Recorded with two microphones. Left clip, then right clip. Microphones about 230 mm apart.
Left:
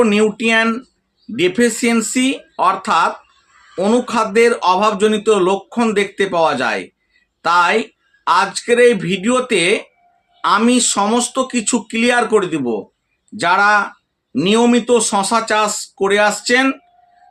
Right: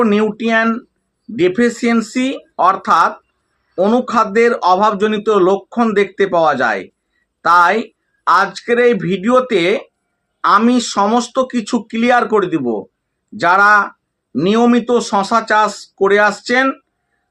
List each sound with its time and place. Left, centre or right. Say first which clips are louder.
0.0 s speech: left 1 dB; centre